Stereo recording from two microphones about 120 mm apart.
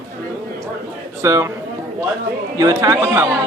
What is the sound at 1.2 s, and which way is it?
Speech, 25° right (ahead or behind).